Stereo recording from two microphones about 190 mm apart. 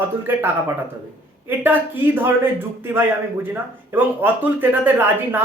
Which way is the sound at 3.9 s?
10° right (ahead or behind).